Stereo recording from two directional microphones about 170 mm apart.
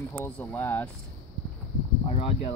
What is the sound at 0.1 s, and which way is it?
Speech, 10° left (ahead or behind).